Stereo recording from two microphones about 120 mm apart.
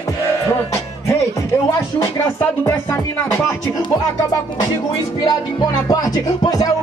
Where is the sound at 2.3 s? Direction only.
25° left (ahead or behind).